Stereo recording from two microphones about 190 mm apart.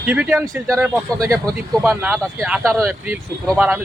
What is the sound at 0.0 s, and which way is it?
Speech, 10° right (ahead or behind).